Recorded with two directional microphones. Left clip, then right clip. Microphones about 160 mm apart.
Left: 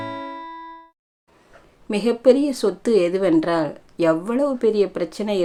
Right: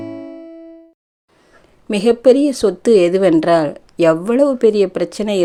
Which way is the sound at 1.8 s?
45° right (ahead or behind).